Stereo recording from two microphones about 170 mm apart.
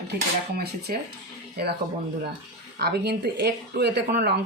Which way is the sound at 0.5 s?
65° right (ahead or behind).